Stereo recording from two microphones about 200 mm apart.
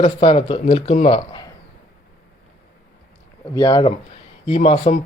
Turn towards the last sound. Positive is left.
turn(degrees=30)  # may be behind; listen again after turning